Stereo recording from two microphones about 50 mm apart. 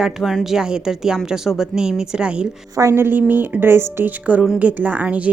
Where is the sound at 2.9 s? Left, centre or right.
Right.